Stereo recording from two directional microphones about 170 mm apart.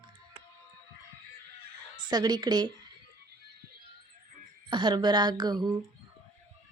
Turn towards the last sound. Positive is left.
turn(degrees=-25)  # may be behind; listen again after turning